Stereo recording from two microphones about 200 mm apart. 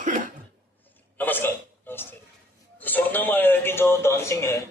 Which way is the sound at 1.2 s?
10° left (ahead or behind).